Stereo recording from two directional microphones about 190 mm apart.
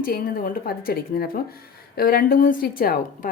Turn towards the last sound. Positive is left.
turn(degrees=50)  # may be behind; listen again after turning